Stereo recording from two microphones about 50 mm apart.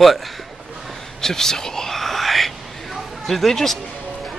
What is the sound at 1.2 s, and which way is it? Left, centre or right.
Whispering, centre.